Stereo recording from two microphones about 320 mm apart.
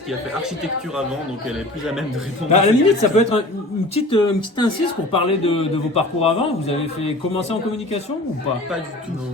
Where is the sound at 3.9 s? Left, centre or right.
Centre.